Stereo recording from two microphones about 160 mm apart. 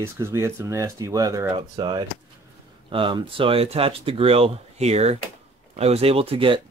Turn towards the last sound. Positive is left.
turn(degrees=-35)  # may be behind; listen again after turning